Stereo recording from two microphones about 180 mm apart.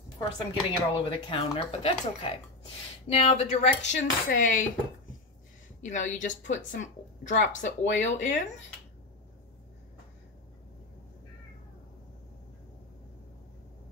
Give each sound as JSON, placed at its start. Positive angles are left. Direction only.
{"t": 0.4, "sound": "speech", "side_deg": 30}
{"t": 5.8, "sound": "a woman's voice", "side_deg": 40}